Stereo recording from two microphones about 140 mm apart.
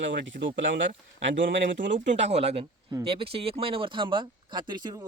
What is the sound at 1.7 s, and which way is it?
Speech, 65° right (ahead or behind).